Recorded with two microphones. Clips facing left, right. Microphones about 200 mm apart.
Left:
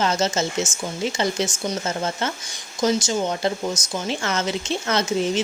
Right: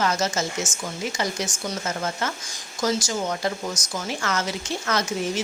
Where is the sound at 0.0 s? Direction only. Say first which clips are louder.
Left 2 dB; 25° left (ahead or behind).